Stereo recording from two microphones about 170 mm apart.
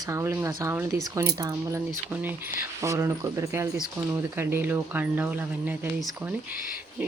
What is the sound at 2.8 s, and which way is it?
Speech, 15° right (ahead or behind).